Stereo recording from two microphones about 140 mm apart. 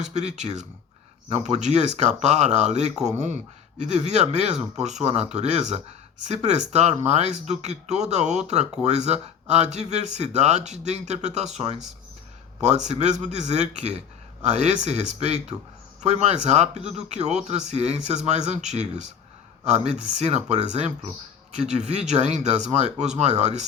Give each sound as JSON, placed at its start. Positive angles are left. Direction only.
{"t": 0.0, "sound": "speech", "side_deg": -55}